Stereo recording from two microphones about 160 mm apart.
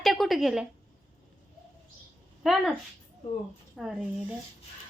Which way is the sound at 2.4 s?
Centre (ahead or behind).